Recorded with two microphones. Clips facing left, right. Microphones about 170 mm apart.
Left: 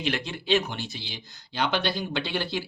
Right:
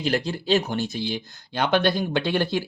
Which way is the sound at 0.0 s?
40° right (ahead or behind).